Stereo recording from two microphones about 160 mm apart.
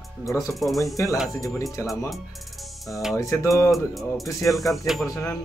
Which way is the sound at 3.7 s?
Centre (ahead or behind).